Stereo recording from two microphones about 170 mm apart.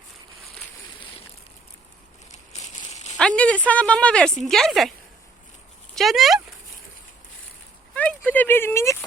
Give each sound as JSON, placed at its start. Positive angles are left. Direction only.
{"t": 2.5, "sound": "crumpling", "side_deg": 40}
{"t": 3.2, "sound": "speech", "side_deg": 5}
{"t": 5.9, "sound": "speech", "side_deg": 0}
{"t": 7.9, "sound": "a sound", "side_deg": 10}